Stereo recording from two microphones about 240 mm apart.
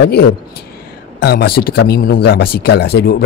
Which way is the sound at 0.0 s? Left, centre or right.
Left.